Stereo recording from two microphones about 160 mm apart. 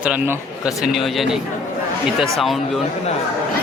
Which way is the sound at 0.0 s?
5° right (ahead or behind).